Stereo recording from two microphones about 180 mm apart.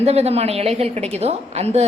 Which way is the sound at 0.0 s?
35° right (ahead or behind).